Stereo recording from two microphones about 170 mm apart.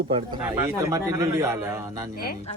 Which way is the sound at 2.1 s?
60° left (ahead or behind).